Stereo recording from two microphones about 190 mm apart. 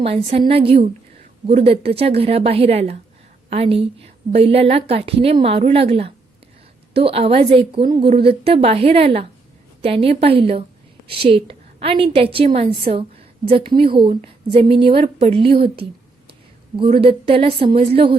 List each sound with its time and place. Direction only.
0.0 s a woman's voice: 30° right (ahead or behind)
15.6 s a woman's voice: 55° right (ahead or behind)
16.7 s a woman's voice: 30° right (ahead or behind)